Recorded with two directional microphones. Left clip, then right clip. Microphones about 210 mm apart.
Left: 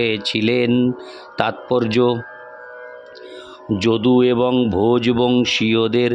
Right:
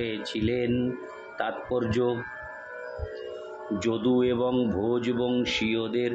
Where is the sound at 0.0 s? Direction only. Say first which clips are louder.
Left 11 dB; 50° left (ahead or behind).